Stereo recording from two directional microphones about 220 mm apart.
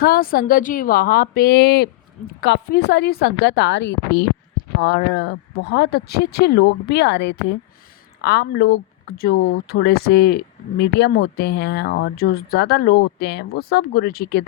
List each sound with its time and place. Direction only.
0.0 s speech: 40° left (ahead or behind)